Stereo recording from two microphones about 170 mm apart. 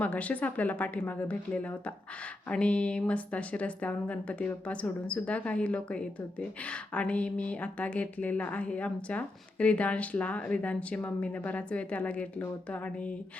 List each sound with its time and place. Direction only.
0.0 s a woman's voice: 10° left (ahead or behind)